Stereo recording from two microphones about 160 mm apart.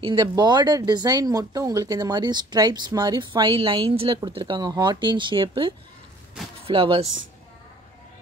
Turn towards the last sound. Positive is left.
turn(degrees=-35)  # may be behind; listen again after turning